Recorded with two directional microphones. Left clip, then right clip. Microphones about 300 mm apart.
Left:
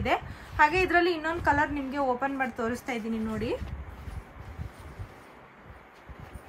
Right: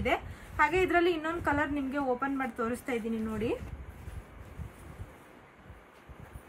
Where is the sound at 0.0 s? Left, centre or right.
Centre.